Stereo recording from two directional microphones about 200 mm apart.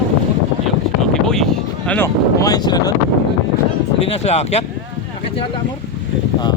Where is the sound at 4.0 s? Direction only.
30° left (ahead or behind).